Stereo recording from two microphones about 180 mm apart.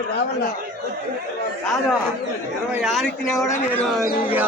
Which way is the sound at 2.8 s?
Centre (ahead or behind).